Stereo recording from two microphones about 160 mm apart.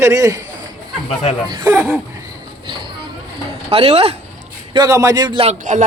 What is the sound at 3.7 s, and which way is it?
Speech, 40° right (ahead or behind).